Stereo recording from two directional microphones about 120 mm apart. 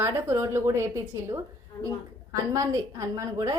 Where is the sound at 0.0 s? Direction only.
20° right (ahead or behind).